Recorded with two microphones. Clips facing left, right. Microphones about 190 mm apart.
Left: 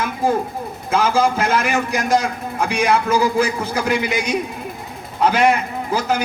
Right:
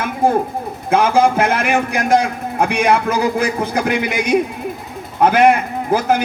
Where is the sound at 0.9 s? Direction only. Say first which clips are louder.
Right 4 dB; 60° right (ahead or behind).